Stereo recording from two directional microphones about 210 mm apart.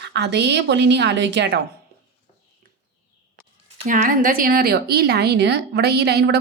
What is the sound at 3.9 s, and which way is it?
A woman's voice, 40° right (ahead or behind).